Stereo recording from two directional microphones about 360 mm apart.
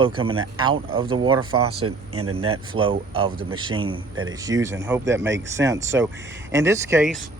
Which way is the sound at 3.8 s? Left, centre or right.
Right.